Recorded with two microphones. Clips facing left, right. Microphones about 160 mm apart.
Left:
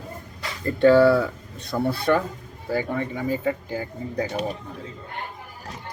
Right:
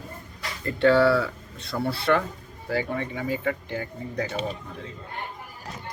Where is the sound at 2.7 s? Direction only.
45° left (ahead or behind).